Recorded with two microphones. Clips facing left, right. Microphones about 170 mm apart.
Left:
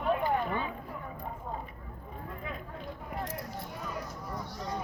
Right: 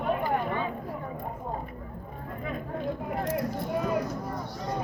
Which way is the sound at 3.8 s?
75° right (ahead or behind).